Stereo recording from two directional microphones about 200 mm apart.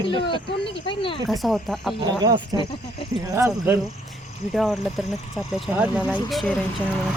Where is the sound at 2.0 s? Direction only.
20° right (ahead or behind).